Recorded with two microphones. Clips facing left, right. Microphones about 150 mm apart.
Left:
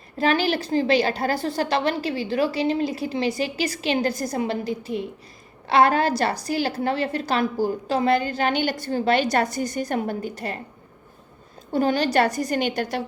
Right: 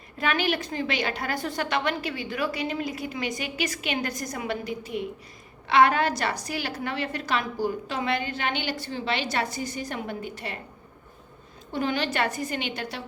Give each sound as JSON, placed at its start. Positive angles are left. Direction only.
{"t": 0.2, "sound": "a woman's voice", "side_deg": 35}
{"t": 11.7, "sound": "a woman's voice", "side_deg": 40}